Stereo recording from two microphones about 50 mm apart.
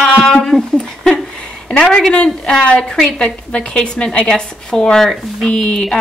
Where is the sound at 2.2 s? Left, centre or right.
Centre.